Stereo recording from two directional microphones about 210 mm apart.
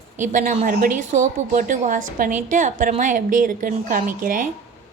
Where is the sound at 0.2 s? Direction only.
40° right (ahead or behind).